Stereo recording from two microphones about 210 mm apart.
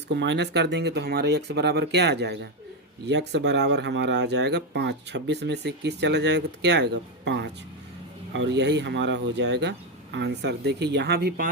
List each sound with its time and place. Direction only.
0.1 s speech: 55° right (ahead or behind)